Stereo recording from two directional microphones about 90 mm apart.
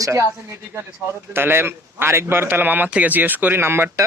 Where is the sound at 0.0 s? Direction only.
35° right (ahead or behind).